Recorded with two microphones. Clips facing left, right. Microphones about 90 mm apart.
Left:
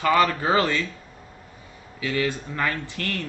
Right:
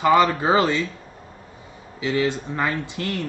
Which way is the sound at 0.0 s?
20° right (ahead or behind).